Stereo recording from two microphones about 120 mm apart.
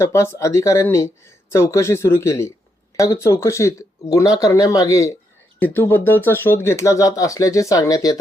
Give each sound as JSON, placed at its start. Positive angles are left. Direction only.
{"t": 0.0, "sound": "speech", "side_deg": 25}
{"t": 5.5, "sound": "speech", "side_deg": 15}